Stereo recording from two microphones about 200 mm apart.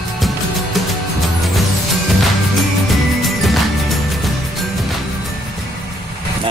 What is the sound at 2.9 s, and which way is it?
Music, centre (ahead or behind).